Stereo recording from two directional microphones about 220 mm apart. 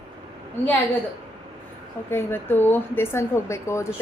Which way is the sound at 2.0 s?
10° left (ahead or behind).